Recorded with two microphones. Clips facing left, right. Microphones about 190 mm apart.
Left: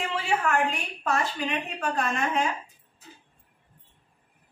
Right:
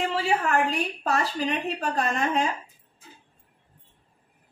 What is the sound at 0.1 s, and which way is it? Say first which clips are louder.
A woman's voice: right 2 dB; 35° right (ahead or behind).